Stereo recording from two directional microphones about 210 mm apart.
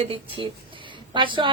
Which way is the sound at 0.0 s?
25° right (ahead or behind).